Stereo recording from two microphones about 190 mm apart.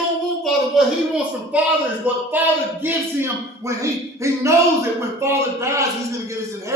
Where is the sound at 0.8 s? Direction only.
Centre (ahead or behind).